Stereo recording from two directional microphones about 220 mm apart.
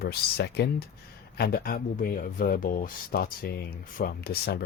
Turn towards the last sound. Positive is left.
turn(degrees=45)  # may be behind; listen again after turning